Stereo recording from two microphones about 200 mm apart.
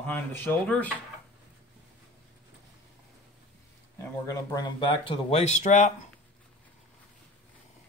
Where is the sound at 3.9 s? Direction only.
15° left (ahead or behind); by 5.9 s 35° left (ahead or behind).